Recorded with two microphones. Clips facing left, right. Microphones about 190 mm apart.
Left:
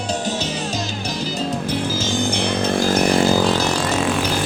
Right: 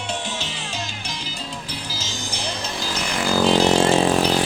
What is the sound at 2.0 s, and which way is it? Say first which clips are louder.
Chainsaw: left 10 dB; 55° left (ahead or behind).